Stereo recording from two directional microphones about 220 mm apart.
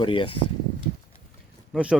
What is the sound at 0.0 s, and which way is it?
Speech, 25° left (ahead or behind).